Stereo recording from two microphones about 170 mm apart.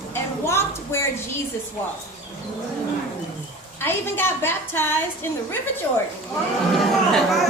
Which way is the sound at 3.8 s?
15° left (ahead or behind).